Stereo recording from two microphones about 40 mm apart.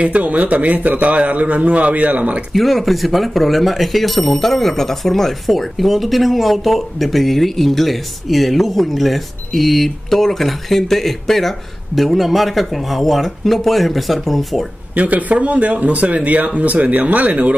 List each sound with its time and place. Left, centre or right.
0.0 s a man's voice: right
2.5 s speech: centre
15.0 s a man's voice: right